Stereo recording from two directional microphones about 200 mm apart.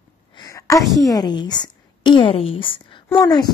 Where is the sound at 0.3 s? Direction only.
20° left (ahead or behind).